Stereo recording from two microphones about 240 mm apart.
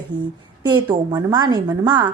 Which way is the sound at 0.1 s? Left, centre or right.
Centre.